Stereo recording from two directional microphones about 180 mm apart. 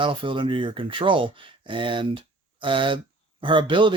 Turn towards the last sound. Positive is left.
turn(degrees=-25)  # may be behind; listen again after turning